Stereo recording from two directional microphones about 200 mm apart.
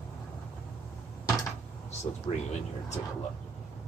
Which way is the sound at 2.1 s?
25° left (ahead or behind).